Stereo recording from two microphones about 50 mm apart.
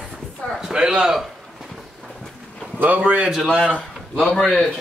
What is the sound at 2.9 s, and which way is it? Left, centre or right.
Speech, right.